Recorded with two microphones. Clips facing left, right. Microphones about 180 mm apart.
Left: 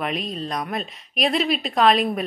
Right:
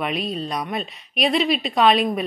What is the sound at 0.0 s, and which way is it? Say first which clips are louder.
Speech: right 2 dB; centre (ahead or behind).